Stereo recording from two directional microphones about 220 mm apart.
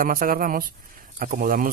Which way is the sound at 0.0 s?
40° right (ahead or behind).